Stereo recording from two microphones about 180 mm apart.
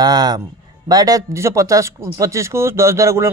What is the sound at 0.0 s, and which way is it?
Speech, 20° right (ahead or behind).